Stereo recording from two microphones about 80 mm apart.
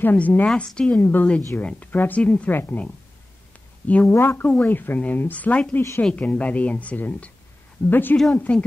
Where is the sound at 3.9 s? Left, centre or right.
Centre.